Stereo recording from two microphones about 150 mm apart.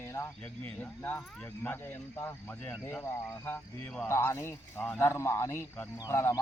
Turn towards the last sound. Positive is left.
turn(degrees=20)  # may be behind; listen again after turning